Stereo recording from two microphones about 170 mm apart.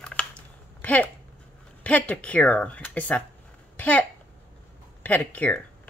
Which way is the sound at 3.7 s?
10° left (ahead or behind).